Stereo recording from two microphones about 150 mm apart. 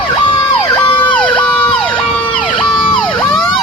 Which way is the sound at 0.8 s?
35° left (ahead or behind).